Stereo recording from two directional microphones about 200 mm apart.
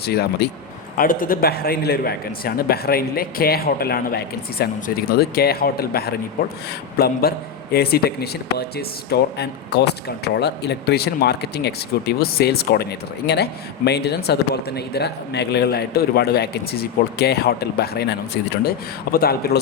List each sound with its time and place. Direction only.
0.0 s a man's voice: 55° left (ahead or behind)